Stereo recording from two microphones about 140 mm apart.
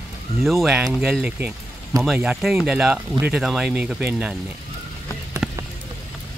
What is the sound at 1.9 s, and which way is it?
Speech, 25° right (ahead or behind).